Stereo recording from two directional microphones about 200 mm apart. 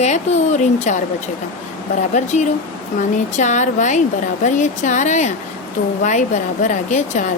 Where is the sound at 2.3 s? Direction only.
35° left (ahead or behind).